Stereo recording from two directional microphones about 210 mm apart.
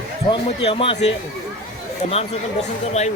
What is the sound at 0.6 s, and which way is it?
Speech, 30° left (ahead or behind).